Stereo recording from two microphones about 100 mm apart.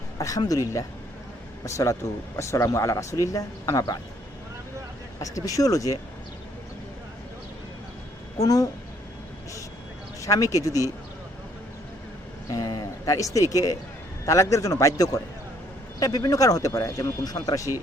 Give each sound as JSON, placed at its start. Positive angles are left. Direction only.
{"t": 0.2, "sound": "speech", "side_deg": 35}
{"t": 1.6, "sound": "speech", "side_deg": 30}
{"t": 5.2, "sound": "speech", "side_deg": 35}
{"t": 8.4, "sound": "speech", "side_deg": 35}
{"t": 10.2, "sound": "speech", "side_deg": 35}
{"t": 12.5, "sound": "speech", "side_deg": 40}